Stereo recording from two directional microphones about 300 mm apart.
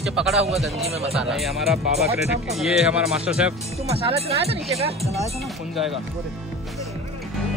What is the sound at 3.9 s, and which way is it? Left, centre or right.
Speech, centre.